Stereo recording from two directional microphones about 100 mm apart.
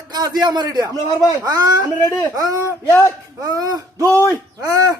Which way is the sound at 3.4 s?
40° right (ahead or behind).